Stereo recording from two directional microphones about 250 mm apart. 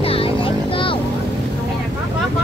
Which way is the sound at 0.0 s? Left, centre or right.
Left.